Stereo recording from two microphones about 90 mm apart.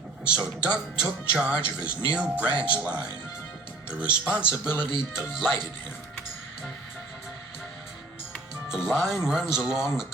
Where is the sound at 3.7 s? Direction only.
15° right (ahead or behind).